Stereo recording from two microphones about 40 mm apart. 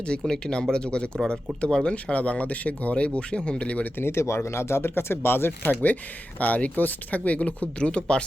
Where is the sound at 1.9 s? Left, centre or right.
Left.